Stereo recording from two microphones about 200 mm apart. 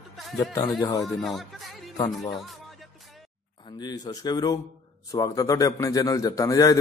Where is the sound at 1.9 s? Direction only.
15° left (ahead or behind).